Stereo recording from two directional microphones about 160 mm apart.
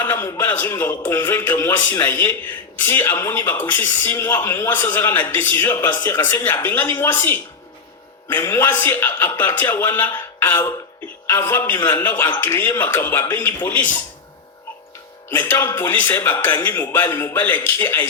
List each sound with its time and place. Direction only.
0.0 s speech: 15° left (ahead or behind)
11.3 s speech: 15° left (ahead or behind)
15.3 s speech: 15° left (ahead or behind)